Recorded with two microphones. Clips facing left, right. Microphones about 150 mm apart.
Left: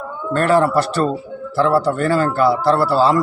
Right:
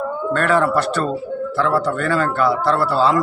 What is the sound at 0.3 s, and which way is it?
A man's voice, 35° left (ahead or behind).